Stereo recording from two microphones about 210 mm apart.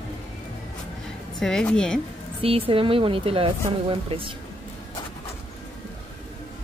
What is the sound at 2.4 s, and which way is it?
Speech, 25° right (ahead or behind).